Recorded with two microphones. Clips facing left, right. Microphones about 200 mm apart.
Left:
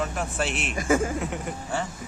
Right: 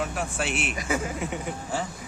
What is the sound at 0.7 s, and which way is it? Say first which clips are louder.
Speech: left 9 dB; 50° left (ahead or behind).